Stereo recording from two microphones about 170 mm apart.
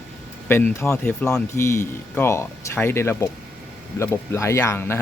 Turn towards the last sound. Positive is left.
turn(degrees=15)  # may be behind; listen again after turning